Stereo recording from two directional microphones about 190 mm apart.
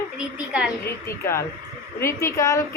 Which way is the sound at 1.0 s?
15° left (ahead or behind).